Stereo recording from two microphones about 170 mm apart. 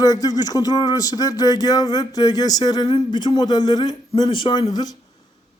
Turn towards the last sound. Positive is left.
turn(degrees=25)  # may be behind; listen again after turning